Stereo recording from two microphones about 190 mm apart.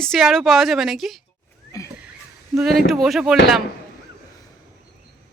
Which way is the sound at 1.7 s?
15° left (ahead or behind).